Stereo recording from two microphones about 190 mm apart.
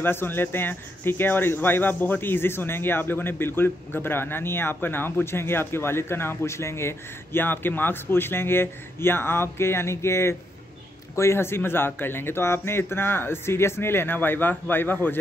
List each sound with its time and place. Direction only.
0.0 s speech: 10° left (ahead or behind)